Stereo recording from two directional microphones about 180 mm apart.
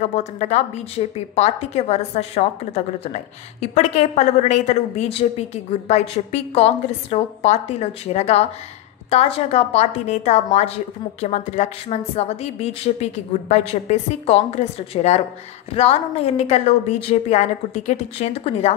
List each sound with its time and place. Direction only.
0.0 s a woman's voice: 40° left (ahead or behind)